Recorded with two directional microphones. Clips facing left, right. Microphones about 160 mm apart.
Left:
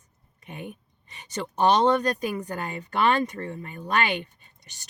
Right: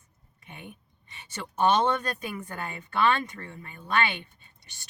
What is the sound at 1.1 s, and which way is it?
Speech, 40° left (ahead or behind).